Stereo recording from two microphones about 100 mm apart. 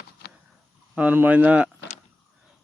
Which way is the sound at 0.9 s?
15° right (ahead or behind).